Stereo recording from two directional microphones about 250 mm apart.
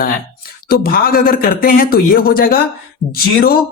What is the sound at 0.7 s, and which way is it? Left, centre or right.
Speech, left.